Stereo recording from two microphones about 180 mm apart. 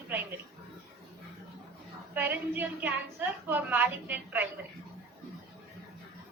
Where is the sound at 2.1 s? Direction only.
10° right (ahead or behind).